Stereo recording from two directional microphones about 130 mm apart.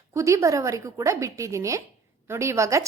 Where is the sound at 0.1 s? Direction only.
20° right (ahead or behind).